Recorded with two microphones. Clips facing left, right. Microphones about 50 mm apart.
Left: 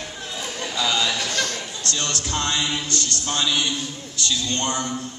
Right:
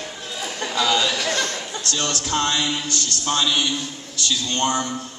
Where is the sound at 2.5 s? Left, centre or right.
Left.